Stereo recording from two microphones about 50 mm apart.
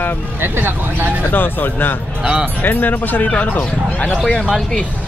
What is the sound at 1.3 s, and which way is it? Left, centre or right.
Speech, left.